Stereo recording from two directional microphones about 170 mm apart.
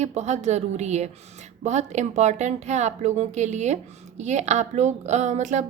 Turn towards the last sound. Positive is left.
turn(degrees=-45)  # may be behind; listen again after turning